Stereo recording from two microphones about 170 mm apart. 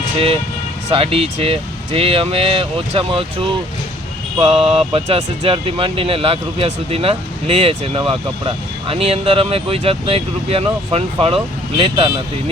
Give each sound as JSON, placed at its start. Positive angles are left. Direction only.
{"t": 0.9, "sound": "speech", "side_deg": -35}